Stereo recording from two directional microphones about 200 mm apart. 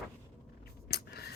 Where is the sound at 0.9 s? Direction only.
50° left (ahead or behind).